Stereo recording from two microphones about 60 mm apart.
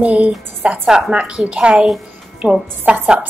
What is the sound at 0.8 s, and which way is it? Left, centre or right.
A woman's voice, centre.